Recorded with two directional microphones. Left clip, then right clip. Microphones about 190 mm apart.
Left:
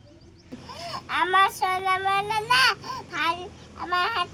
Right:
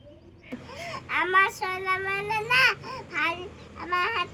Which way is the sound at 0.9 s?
20° left (ahead or behind).